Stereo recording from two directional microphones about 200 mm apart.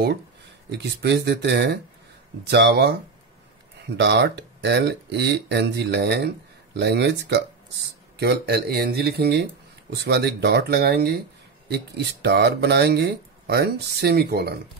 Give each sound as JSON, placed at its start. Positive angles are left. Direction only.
{"t": 0.7, "sound": "speech", "side_deg": -60}